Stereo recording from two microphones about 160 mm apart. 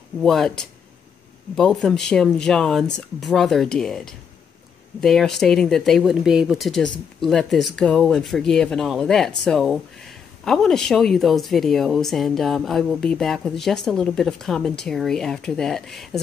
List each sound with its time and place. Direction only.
0.2 s speech: 5° left (ahead or behind)